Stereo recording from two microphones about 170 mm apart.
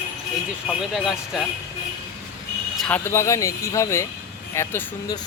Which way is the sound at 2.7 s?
5° left (ahead or behind).